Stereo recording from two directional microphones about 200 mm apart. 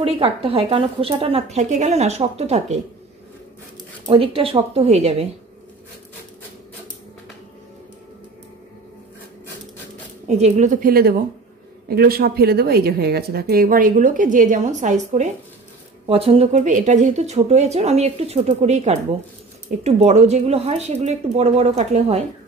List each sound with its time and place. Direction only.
0.0 s speech: 30° right (ahead or behind)
4.0 s speech: 30° right (ahead or behind)
10.2 s a woman's voice: 35° right (ahead or behind)